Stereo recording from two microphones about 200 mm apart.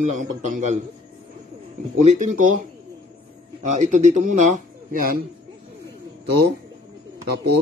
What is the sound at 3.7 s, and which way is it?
Speech, 35° right (ahead or behind).